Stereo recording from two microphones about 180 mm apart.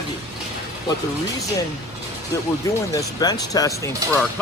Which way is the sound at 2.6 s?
20° left (ahead or behind).